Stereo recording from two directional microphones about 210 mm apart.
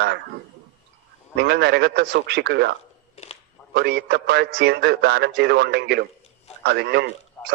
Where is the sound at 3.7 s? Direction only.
50° right (ahead or behind).